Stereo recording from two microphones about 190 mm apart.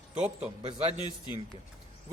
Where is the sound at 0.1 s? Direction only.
5° right (ahead or behind).